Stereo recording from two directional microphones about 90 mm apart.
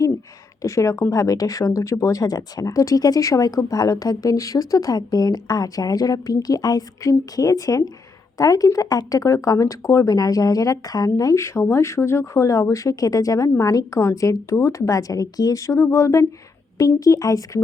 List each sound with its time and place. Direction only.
0.6 s speech: 35° left (ahead or behind)